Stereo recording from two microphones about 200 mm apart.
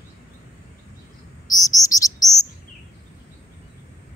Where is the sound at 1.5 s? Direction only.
15° left (ahead or behind).